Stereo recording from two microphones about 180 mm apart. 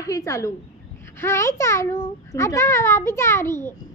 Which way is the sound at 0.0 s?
20° left (ahead or behind).